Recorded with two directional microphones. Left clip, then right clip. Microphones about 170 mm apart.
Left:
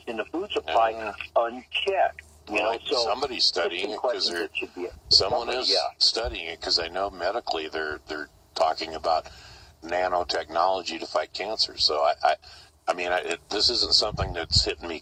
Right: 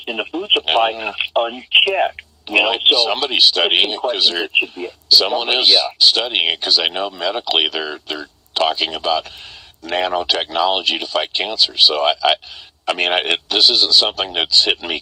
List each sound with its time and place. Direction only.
0.0 s speech: 25° right (ahead or behind)